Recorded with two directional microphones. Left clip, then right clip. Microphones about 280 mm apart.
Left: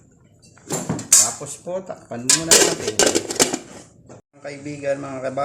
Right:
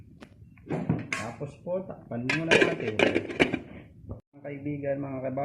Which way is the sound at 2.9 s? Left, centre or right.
Left.